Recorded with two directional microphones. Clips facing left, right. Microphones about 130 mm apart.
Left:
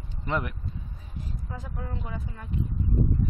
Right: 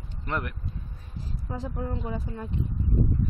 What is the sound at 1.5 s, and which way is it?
A woman's voice, 30° right (ahead or behind).